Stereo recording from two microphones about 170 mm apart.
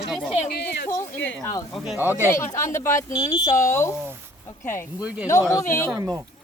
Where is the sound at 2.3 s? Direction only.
15° left (ahead or behind).